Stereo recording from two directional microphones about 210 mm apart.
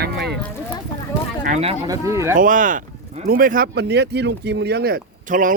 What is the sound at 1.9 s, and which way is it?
Speech, 15° right (ahead or behind).